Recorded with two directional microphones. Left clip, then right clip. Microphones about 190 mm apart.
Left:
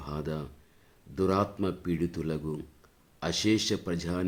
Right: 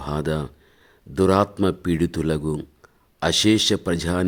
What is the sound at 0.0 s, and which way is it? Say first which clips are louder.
Speech: right 11 dB; 50° right (ahead or behind).